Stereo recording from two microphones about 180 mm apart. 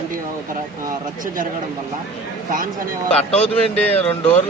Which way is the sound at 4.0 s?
35° left (ahead or behind).